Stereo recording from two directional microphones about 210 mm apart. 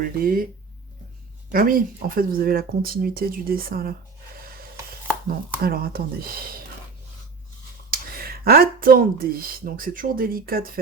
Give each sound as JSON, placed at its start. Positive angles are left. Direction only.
{"t": 0.0, "sound": "speech", "side_deg": -45}
{"t": 1.5, "sound": "speech", "side_deg": -45}
{"t": 5.6, "sound": "speech", "side_deg": -45}
{"t": 7.9, "sound": "speech", "side_deg": -45}